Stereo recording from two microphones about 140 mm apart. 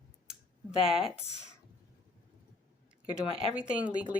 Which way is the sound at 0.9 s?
Centre (ahead or behind).